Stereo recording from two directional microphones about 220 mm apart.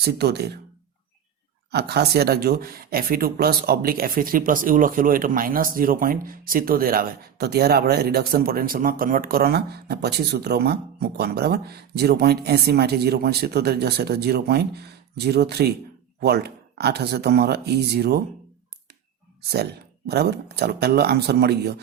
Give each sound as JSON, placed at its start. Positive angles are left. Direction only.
{"t": 0.0, "sound": "speech", "side_deg": -50}
{"t": 1.7, "sound": "speech", "side_deg": -45}
{"t": 20.1, "sound": "speech", "side_deg": -50}